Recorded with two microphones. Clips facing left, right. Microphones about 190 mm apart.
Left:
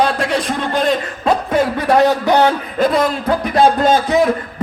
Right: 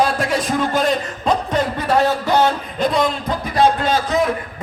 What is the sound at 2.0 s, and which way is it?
Speech, 15° left (ahead or behind).